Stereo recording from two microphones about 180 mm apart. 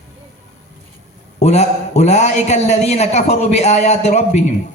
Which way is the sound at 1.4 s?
40° left (ahead or behind).